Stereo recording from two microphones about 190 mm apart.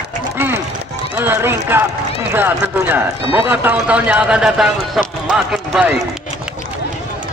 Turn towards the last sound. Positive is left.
turn(degrees=-5)  # may be behind; listen again after turning